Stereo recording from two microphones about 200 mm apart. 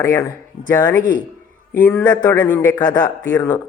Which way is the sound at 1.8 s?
15° left (ahead or behind).